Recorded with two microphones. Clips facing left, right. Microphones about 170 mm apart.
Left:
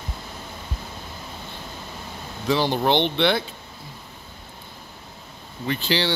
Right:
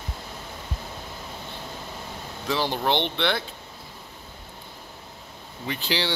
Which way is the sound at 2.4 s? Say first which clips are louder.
Left 4 dB; 5° right (ahead or behind).